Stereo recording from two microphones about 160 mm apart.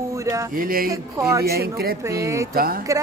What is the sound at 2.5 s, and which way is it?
Speech, 65° right (ahead or behind).